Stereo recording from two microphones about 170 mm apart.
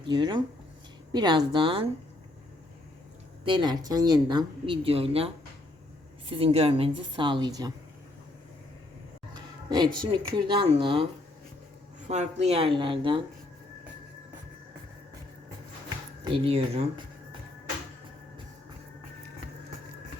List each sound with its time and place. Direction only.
0.0 s a woman's voice: 25° right (ahead or behind)
3.4 s a woman's voice: 25° right (ahead or behind)
9.3 s speech: 25° right (ahead or behind)
12.0 s a woman's voice: 40° right (ahead or behind)
16.2 s a woman's voice: 35° right (ahead or behind)